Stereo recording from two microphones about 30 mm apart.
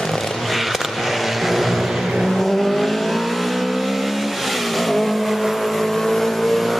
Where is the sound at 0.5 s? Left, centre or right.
Centre.